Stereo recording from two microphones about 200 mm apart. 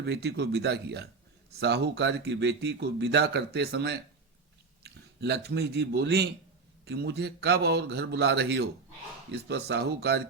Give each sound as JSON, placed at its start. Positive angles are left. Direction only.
{"t": 0.0, "sound": "speech", "side_deg": -55}